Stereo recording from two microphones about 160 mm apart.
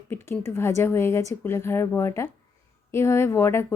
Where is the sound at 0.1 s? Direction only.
15° left (ahead or behind).